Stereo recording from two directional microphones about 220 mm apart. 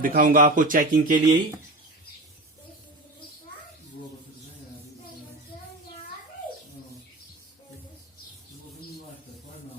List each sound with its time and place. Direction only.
0.0 s speech: 40° right (ahead or behind)
1.2 s speech: 15° right (ahead or behind)